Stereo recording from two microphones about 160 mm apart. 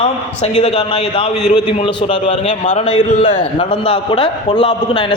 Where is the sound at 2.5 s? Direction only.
45° left (ahead or behind).